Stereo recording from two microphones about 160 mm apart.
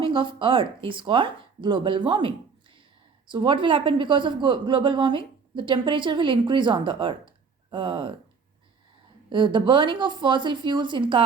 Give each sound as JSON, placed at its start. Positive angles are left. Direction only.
{"t": 0.0, "sound": "a woman's voice", "side_deg": -30}
{"t": 9.3, "sound": "a woman's voice", "side_deg": -30}